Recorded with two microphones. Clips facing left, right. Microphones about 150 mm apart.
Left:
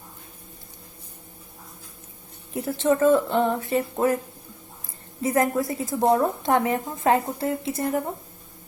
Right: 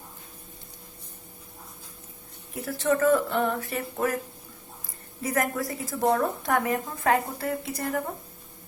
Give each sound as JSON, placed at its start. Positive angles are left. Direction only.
{"t": 2.6, "sound": "a woman's voice", "side_deg": 25}
{"t": 5.2, "sound": "a woman's voice", "side_deg": 25}